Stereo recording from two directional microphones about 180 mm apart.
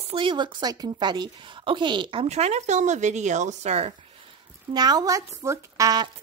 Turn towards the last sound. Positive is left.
turn(degrees=-20)  # may be behind; listen again after turning